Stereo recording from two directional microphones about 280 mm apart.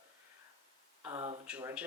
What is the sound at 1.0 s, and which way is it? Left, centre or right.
Speech, centre.